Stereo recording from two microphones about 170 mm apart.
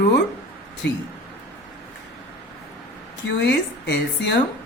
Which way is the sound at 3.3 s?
85° left.